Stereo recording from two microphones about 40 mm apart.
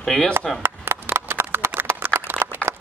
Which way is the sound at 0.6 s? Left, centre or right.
Right.